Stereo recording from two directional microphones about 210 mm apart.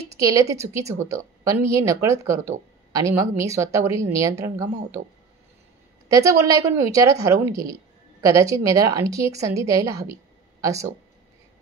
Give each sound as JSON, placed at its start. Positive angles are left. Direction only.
{"t": 0.2, "sound": "a woman's voice", "side_deg": -15}
{"t": 6.0, "sound": "a woman's voice", "side_deg": -15}